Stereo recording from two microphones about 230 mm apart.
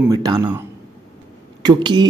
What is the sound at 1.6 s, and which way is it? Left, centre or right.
Speech, centre.